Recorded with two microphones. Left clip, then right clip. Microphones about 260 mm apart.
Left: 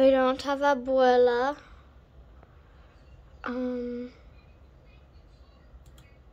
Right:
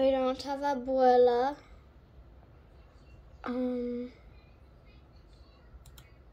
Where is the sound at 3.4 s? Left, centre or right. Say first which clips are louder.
Left 2 dB; centre.